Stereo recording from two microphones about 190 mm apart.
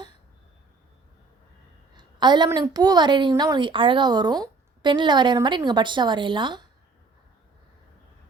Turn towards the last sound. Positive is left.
turn(degrees=-25)  # may be behind; listen again after turning